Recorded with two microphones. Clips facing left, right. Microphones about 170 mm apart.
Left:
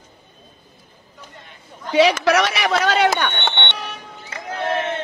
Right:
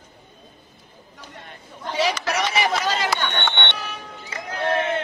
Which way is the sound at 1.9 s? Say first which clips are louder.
Left 8 dB; 65° left (ahead or behind).